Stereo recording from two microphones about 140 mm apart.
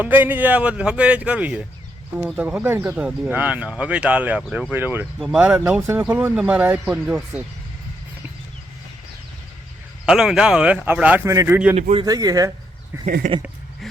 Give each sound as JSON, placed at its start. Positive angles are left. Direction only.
{"t": 0.0, "sound": "speech", "side_deg": -15}
{"t": 10.1, "sound": "speech", "side_deg": -5}
{"t": 13.2, "sound": "speech", "side_deg": -65}